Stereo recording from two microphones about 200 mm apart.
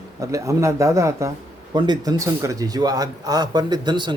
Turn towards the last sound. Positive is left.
turn(degrees=-20)  # may be behind; listen again after turning